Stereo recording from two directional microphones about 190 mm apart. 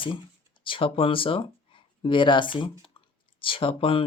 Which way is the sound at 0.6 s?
25° left (ahead or behind).